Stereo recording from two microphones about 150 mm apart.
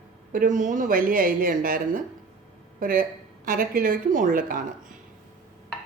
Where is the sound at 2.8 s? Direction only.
70° right (ahead or behind).